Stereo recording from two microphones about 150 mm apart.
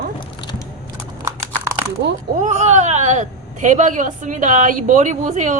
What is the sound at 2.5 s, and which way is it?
A woman's voice, 50° right (ahead or behind).